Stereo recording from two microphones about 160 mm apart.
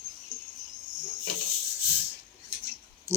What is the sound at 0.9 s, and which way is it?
Cricket, 25° right (ahead or behind).